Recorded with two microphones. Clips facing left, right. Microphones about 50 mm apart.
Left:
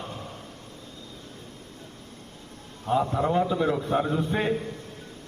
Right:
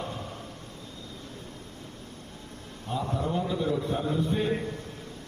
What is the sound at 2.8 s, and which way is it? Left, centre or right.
A man's voice, left.